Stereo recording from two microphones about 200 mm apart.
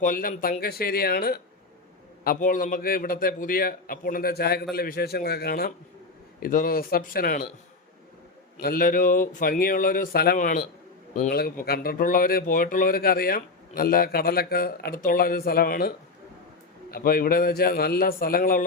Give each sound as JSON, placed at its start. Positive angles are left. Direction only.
{"t": 0.0, "sound": "speech", "side_deg": 45}
{"t": 8.6, "sound": "speech", "side_deg": 45}
{"t": 16.9, "sound": "speech", "side_deg": 45}